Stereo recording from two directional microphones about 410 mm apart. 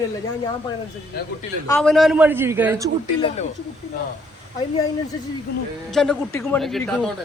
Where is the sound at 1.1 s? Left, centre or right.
Left.